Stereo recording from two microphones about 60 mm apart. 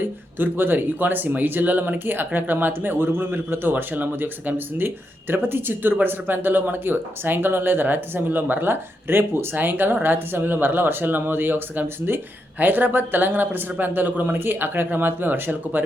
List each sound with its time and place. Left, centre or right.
0.0 s speech: right